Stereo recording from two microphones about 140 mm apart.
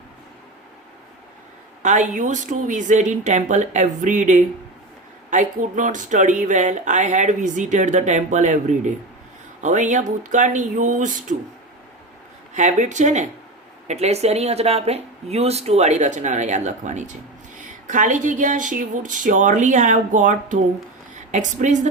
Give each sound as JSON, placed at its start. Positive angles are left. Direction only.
{"t": 1.8, "sound": "speech", "side_deg": -60}
{"t": 12.5, "sound": "speech", "side_deg": -60}